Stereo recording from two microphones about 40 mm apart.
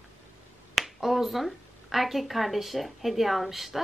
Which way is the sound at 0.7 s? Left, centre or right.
Centre.